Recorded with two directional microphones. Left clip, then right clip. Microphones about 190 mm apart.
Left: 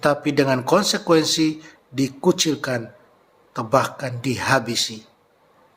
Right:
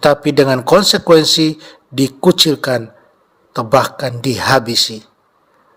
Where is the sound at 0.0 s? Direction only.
45° right (ahead or behind).